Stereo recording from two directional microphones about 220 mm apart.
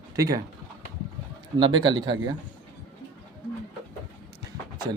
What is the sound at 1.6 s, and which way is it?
Speech, 20° right (ahead or behind).